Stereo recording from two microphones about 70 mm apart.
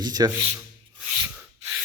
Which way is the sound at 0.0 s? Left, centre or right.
Right.